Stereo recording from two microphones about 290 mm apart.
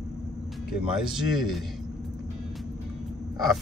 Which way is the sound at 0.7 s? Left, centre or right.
Centre.